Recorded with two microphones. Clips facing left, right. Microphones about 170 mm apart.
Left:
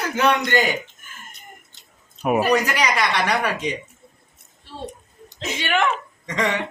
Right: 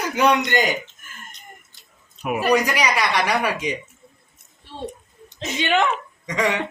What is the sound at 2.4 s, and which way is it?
Speech, 10° right (ahead or behind).